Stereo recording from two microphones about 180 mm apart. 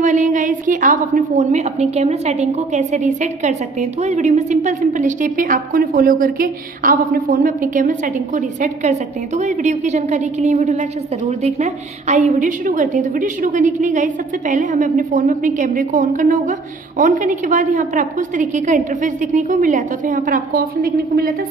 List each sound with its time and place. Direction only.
0.0 s a woman's voice: 45° right (ahead or behind)